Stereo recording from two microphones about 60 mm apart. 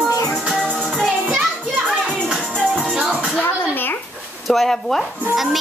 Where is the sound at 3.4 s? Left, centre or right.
Left.